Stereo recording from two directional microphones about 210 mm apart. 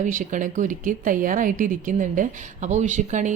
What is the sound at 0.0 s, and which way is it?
A woman's voice, 40° right (ahead or behind).